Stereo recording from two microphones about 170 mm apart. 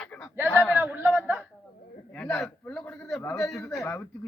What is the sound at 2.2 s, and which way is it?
Speech, 5° left (ahead or behind).